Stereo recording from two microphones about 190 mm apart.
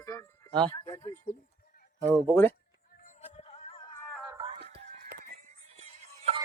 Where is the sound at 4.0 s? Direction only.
5° left (ahead or behind).